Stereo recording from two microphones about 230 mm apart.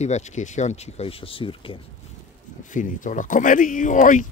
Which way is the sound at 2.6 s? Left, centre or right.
Left.